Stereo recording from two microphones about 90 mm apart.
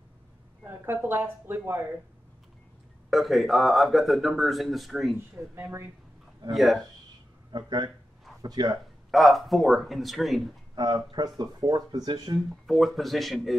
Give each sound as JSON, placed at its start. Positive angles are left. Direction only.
{"t": 0.7, "sound": "a woman's voice", "side_deg": -25}
{"t": 3.1, "sound": "speech", "side_deg": 0}
{"t": 5.1, "sound": "speech", "side_deg": -30}
{"t": 6.5, "sound": "speech", "side_deg": 0}
{"t": 7.5, "sound": "speech", "side_deg": -50}
{"t": 9.1, "sound": "speech", "side_deg": 0}
{"t": 10.7, "sound": "speech", "side_deg": -50}
{"t": 12.4, "sound": "speech", "side_deg": 0}